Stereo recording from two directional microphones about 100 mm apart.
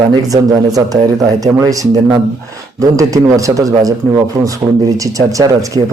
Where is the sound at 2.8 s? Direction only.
35° right (ahead or behind).